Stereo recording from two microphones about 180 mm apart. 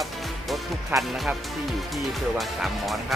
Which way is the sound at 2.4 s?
Centre (ahead or behind).